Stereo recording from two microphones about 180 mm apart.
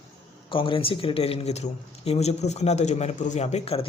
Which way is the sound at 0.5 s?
30° left (ahead or behind).